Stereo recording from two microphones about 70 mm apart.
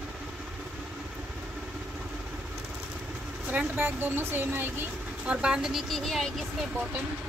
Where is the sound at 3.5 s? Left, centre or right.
Right.